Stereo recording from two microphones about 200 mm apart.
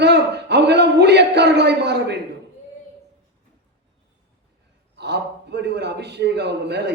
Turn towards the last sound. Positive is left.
turn(degrees=-55)  # may be behind; listen again after turning